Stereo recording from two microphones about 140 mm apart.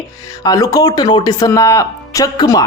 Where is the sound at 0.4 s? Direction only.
25° left (ahead or behind).